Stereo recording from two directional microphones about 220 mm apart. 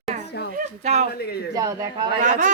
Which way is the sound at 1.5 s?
15° right (ahead or behind).